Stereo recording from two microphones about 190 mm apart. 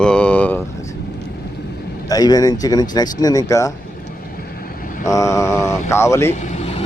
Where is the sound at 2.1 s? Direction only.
20° left (ahead or behind).